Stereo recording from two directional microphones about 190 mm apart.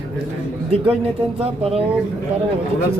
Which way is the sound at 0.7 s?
30° right (ahead or behind).